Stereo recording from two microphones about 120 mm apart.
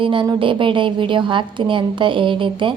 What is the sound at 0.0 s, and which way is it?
A woman's voice, 45° right (ahead or behind).